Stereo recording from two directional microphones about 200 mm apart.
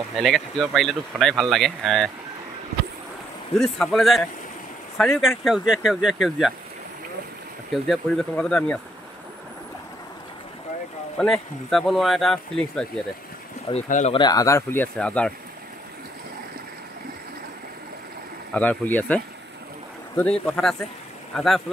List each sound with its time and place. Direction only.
0.2 s speech: centre (ahead or behind)
3.5 s speech: centre (ahead or behind)
7.7 s speech: centre (ahead or behind)
11.1 s speech: 5° left (ahead or behind)
13.8 s speech: 40° left (ahead or behind)
14.1 s speech: 20° left (ahead or behind)
18.5 s speech: 10° left (ahead or behind)